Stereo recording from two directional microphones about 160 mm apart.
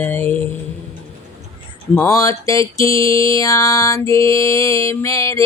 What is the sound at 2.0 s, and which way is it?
Mantra, 20° left (ahead or behind).